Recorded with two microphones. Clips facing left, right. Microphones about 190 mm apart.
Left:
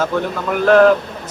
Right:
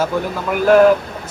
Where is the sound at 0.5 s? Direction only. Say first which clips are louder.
Even; 5° right (ahead or behind).